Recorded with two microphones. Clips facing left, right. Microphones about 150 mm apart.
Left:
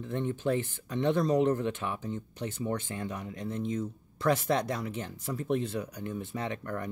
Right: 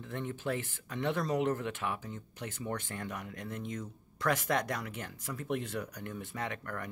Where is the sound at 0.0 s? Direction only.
25° left (ahead or behind).